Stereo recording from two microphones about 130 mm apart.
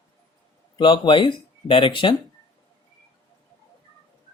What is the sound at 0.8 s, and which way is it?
Speech, 40° left (ahead or behind).